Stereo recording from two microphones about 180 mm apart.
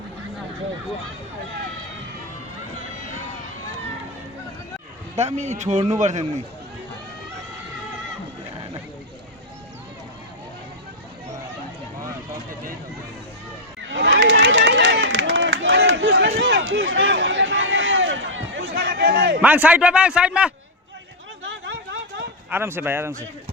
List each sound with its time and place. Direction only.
5.1 s a man's voice: 40° right (ahead or behind)
13.9 s run: 80° right
19.4 s a man's voice: 10° right (ahead or behind)
21.4 s a sound: 90° right
22.4 s a man's voice: 10° right (ahead or behind)